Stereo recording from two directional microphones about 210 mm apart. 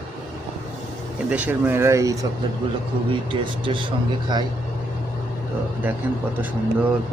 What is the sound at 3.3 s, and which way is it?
Speech, 25° right (ahead or behind).